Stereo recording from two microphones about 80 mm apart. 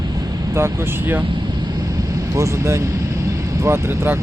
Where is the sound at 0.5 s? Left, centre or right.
Right.